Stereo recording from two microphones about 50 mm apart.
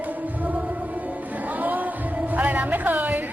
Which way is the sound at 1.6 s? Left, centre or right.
Right.